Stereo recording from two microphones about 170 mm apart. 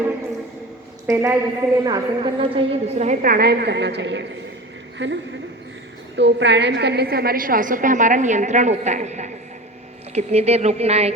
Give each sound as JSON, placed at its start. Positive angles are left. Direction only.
{"t": 1.0, "sound": "a woman's voice", "side_deg": -15}